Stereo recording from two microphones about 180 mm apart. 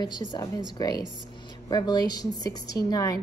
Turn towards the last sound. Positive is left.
turn(degrees=20)  # may be behind; listen again after turning